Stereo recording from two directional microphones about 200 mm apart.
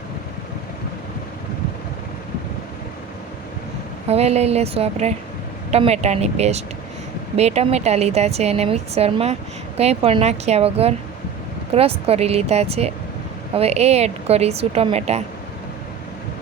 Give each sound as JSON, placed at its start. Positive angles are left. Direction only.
{"t": 4.1, "sound": "a woman's voice", "side_deg": -30}